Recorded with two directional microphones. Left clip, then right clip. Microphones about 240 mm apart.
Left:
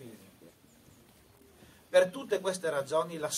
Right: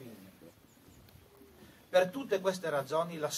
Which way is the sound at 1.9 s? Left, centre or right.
Left.